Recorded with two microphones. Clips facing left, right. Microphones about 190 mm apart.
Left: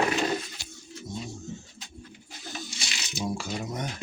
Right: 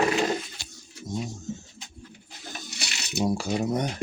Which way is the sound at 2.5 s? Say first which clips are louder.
Even; 65° right (ahead or behind).